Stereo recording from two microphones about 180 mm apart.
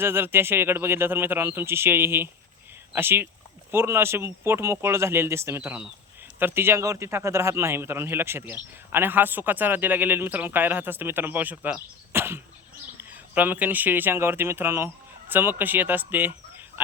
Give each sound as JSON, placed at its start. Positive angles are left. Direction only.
{"t": 0.0, "sound": "speech", "side_deg": -15}